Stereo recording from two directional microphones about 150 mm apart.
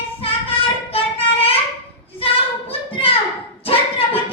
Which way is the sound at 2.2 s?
40° left (ahead or behind).